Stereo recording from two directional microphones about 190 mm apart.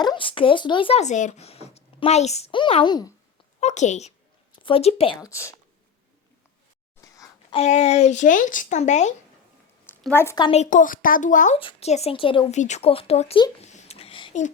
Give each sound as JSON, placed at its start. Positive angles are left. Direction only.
{"t": 0.0, "sound": "speech", "side_deg": 25}
{"t": 3.6, "sound": "speech", "side_deg": 35}
{"t": 5.2, "sound": "speech", "side_deg": 15}
{"t": 7.0, "sound": "a sound", "side_deg": 20}
{"t": 7.5, "sound": "speech", "side_deg": 35}
{"t": 10.0, "sound": "speech", "side_deg": 10}
{"t": 10.5, "sound": "speech", "side_deg": 40}
{"t": 13.7, "sound": "a sound", "side_deg": 35}